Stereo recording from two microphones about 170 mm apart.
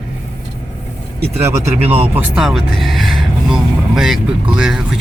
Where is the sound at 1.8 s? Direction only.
35° right (ahead or behind).